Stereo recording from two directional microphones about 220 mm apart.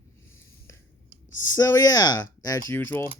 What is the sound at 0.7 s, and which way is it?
Whispering, 15° left (ahead or behind).